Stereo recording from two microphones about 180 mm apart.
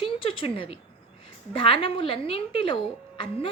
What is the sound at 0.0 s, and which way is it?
A woman's voice, 30° left (ahead or behind).